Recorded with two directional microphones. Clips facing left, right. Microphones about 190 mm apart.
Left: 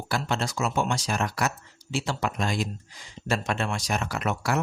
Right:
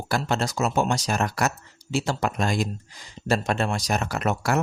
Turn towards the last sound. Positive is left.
turn(degrees=-45)  # may be behind; listen again after turning